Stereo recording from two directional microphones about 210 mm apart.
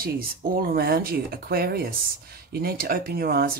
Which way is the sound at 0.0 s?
45° right (ahead or behind).